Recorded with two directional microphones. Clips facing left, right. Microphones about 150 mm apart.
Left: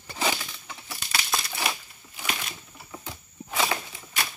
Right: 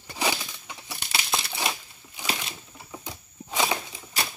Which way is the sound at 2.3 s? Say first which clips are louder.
Right 1 dB; 10° right (ahead or behind).